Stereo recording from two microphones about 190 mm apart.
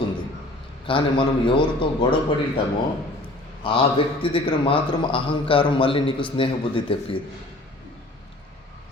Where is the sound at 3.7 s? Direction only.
30° left (ahead or behind).